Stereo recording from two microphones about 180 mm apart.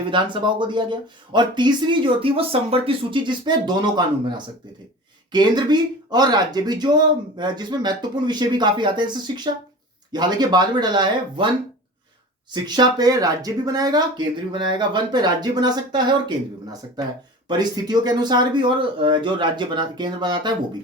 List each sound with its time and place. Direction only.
0.1 s speech: 25° right (ahead or behind)
12.5 s speech: 25° right (ahead or behind)